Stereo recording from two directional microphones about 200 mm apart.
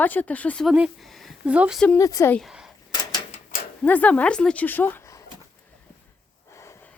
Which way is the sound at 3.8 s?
10° left (ahead or behind).